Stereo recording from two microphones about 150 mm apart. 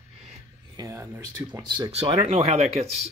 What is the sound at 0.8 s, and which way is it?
Speech, 20° right (ahead or behind).